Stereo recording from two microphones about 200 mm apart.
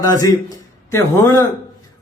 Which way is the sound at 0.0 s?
15° left (ahead or behind).